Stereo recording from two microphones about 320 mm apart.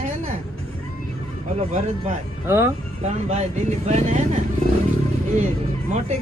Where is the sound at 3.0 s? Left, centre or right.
Right.